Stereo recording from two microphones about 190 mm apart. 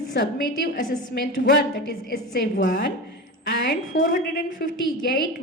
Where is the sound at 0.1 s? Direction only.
70° left (ahead or behind).